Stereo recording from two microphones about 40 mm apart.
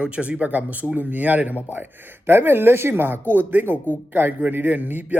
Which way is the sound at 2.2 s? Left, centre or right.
Right.